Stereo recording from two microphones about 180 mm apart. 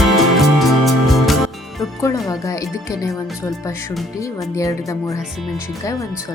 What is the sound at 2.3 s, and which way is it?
Speech, 20° left (ahead or behind).